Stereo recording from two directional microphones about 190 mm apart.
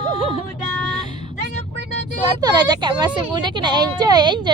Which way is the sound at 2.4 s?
20° right (ahead or behind).